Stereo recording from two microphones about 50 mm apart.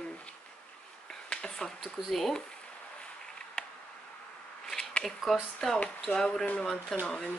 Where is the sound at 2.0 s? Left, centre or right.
Centre.